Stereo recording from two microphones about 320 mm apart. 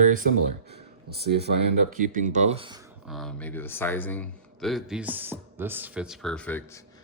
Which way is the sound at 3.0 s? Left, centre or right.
Centre.